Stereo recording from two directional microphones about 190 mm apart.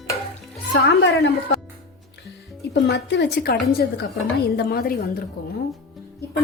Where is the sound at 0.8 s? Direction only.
90° left.